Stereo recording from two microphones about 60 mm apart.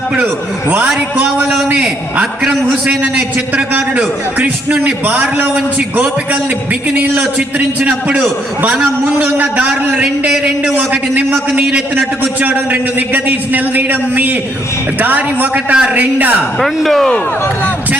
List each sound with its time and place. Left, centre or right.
3.9 s a man's voice: right
7.3 s a man's voice: right
16.6 s speech: centre